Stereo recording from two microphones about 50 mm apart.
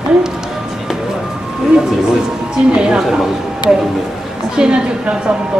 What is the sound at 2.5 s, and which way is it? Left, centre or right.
Speech, centre.